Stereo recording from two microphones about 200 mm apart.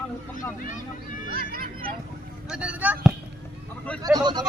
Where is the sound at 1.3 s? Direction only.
50° right (ahead or behind).